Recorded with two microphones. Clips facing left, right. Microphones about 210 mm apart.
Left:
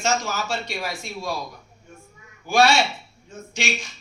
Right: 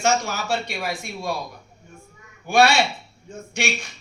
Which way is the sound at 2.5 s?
60° right (ahead or behind).